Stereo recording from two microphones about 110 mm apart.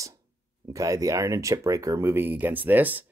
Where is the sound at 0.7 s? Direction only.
30° right (ahead or behind).